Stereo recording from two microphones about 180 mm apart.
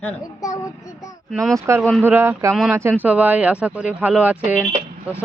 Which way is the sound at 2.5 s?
Centre (ahead or behind).